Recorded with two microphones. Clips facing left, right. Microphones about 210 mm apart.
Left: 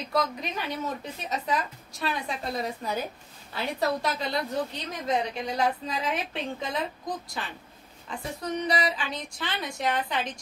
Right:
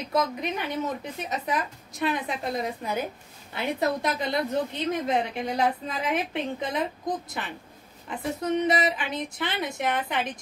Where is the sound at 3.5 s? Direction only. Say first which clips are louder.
Right 2 dB; 20° right (ahead or behind).